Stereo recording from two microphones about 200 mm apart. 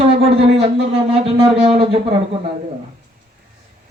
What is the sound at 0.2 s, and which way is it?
Speech, 30° right (ahead or behind).